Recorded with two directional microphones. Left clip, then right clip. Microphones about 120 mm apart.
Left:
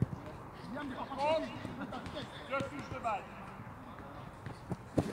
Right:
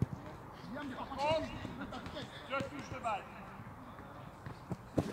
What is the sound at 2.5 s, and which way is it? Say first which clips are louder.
Basketball bounce: left 2 dB; 30° right (ahead or behind).